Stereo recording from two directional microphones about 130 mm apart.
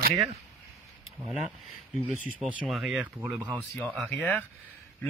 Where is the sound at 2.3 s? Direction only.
10° right (ahead or behind).